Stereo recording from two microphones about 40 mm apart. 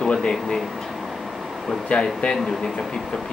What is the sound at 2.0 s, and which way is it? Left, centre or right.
Speech, left.